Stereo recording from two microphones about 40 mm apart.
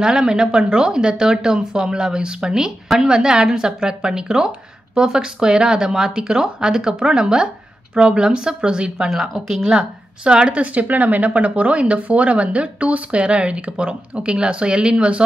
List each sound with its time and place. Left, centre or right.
0.0 s speech: centre
9.1 s speech: centre
10.2 s speech: right
10.6 s speech: right